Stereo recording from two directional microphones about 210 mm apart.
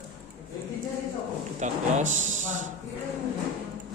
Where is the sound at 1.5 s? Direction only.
35° right (ahead or behind).